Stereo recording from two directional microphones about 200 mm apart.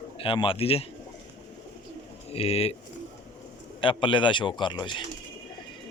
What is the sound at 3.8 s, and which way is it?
A man's voice, 25° left (ahead or behind).